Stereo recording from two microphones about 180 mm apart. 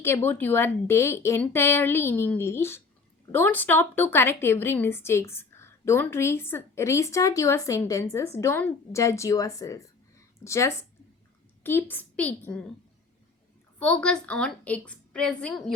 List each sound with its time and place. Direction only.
0.0 s a woman's voice: 15° left (ahead or behind)
13.7 s a woman's voice: 5° left (ahead or behind)